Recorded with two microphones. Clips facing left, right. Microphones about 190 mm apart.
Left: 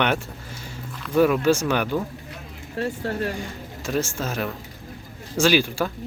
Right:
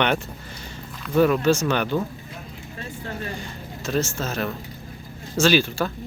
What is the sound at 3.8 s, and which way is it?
Speech, 10° left (ahead or behind).